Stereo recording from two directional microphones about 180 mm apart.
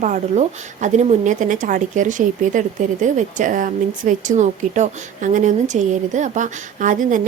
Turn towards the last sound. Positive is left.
turn(degrees=-45)  # may be behind; listen again after turning